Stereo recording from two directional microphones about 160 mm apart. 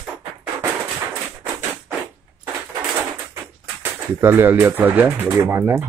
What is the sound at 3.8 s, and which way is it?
Speech, 15° right (ahead or behind).